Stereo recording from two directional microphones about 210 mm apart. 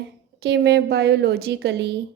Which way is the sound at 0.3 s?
55° right (ahead or behind).